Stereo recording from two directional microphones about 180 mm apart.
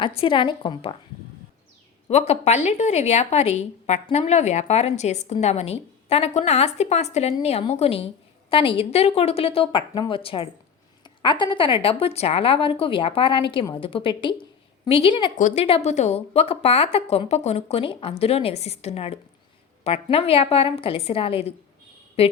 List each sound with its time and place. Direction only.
0.2 s a woman's voice: 30° left (ahead or behind)
2.0 s a woman's voice: 35° left (ahead or behind)
15.4 s a woman's voice: 45° left (ahead or behind)